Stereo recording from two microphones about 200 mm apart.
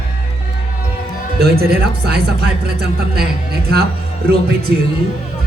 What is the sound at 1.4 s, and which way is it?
Speech, 50° right (ahead or behind).